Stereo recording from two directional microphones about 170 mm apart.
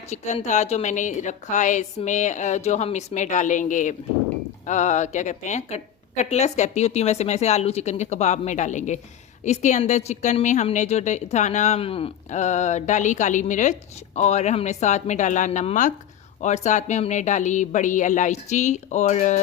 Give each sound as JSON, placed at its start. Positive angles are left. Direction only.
{"t": 0.1, "sound": "a woman's voice", "side_deg": 40}